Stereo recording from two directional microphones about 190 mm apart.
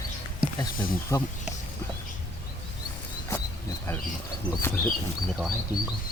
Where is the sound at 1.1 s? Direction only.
15° left (ahead or behind).